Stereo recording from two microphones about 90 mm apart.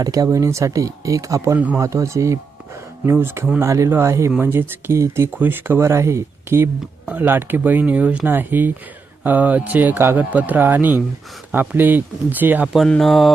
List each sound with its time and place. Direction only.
0.0 s speech: 40° right (ahead or behind)
1.5 s speech: 15° right (ahead or behind)
1.8 s speech: 35° right (ahead or behind); by 12.7 s 20° right (ahead or behind)
13.0 s mantra: centre (ahead or behind)